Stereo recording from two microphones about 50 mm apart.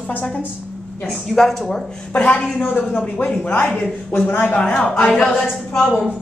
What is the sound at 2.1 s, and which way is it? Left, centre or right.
A woman's voice, left.